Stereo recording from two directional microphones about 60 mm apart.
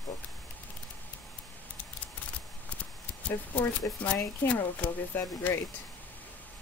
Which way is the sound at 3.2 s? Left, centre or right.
Left.